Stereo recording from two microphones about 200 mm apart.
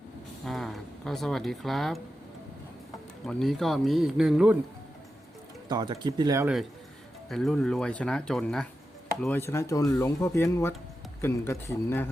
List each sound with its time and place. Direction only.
0.4 s speech: centre (ahead or behind)
3.2 s speech: centre (ahead or behind)
5.6 s speech: 20° right (ahead or behind)
7.3 s speech: centre (ahead or behind)